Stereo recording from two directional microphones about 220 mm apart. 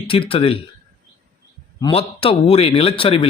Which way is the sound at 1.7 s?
20° left (ahead or behind).